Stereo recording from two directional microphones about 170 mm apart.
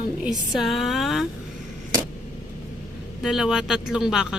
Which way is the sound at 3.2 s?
5° right (ahead or behind).